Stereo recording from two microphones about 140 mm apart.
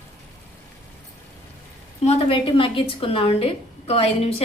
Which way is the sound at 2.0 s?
45° left (ahead or behind).